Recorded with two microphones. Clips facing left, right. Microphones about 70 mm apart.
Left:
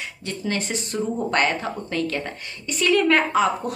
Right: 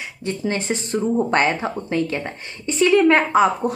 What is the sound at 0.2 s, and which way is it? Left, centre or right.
A woman's voice, right.